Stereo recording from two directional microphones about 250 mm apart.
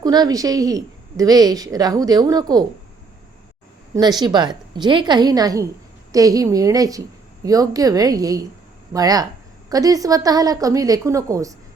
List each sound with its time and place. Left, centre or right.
0.0 s a woman's voice: centre
3.9 s a woman's voice: centre